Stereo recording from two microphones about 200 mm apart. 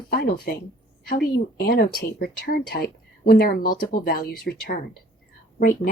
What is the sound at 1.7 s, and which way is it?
Speech, 50° left (ahead or behind).